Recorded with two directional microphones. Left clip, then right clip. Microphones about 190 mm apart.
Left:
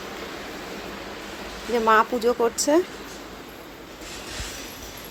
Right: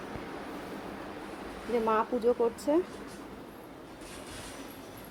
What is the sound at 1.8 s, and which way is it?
Speech, 5° left (ahead or behind).